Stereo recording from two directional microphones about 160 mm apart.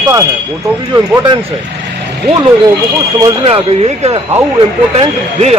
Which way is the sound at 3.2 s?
30° right (ahead or behind).